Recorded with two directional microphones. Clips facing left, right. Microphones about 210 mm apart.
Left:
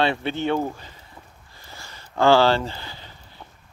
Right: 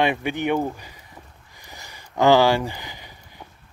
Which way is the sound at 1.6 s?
15° right (ahead or behind).